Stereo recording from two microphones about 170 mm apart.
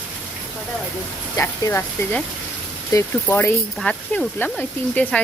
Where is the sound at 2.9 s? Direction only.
15° left (ahead or behind).